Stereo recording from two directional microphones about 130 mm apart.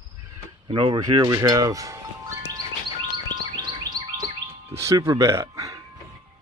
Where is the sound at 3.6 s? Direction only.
35° right (ahead or behind).